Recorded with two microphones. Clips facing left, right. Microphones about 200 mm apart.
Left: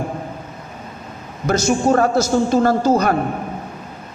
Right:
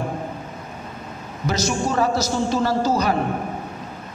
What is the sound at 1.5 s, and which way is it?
A man's voice, 50° left (ahead or behind).